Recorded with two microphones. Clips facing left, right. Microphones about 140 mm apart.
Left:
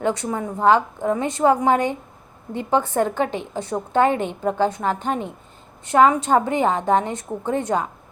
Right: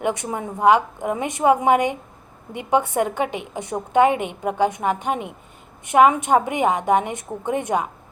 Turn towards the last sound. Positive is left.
turn(degrees=-15)  # may be behind; listen again after turning